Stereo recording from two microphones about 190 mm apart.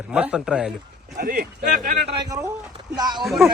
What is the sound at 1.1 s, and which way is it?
Speech, 50° right (ahead or behind).